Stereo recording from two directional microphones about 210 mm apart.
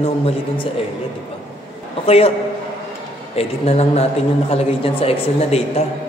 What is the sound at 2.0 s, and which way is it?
Speech, 30° left (ahead or behind).